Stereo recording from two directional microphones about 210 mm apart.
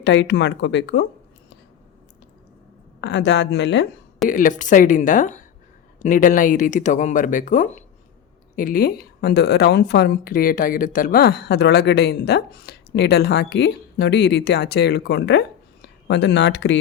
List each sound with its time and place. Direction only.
0.0 s speech: 60° left (ahead or behind)
3.0 s speech: 55° left (ahead or behind)
4.3 s a woman's voice: 40° left (ahead or behind); by 16.7 s 55° left (ahead or behind)